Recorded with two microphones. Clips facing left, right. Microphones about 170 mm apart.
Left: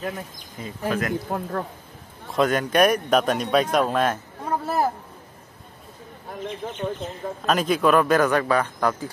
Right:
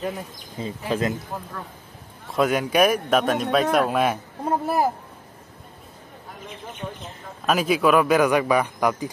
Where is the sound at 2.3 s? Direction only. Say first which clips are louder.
Even; 5° right (ahead or behind).